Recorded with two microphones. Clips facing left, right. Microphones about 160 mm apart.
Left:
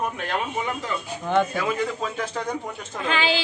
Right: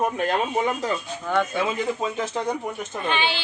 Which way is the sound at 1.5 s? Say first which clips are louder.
Right 1 dB; 20° right (ahead or behind).